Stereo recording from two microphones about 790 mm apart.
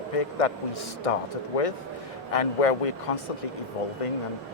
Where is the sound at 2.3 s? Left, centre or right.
Left.